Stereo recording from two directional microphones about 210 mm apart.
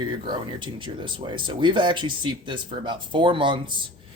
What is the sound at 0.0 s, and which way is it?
Speech, 20° right (ahead or behind).